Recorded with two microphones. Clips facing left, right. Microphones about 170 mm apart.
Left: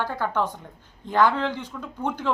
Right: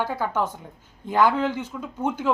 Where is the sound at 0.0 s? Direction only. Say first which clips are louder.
Right 1 dB; 10° right (ahead or behind).